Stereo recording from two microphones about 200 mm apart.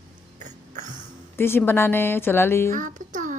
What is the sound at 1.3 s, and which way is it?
A woman's voice, 10° left (ahead or behind).